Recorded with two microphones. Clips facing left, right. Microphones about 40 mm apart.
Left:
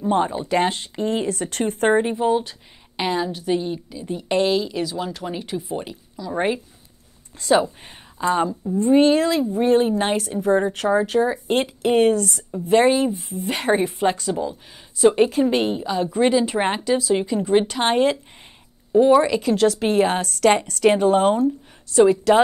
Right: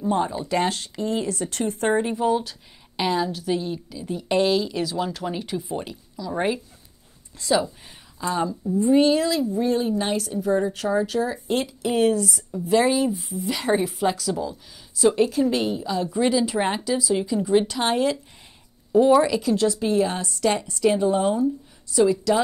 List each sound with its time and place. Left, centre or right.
0.0 s a woman's voice: left
2.0 s a woman's voice: left
7.3 s a woman's voice: left
12.6 s a woman's voice: left
13.2 s a woman's voice: left
18.9 s speech: centre
19.4 s a woman's voice: left